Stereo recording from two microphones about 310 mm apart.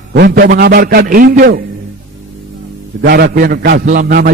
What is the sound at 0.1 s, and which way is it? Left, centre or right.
A man's voice, right.